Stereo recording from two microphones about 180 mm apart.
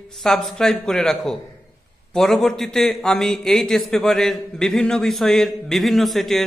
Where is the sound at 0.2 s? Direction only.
Centre (ahead or behind).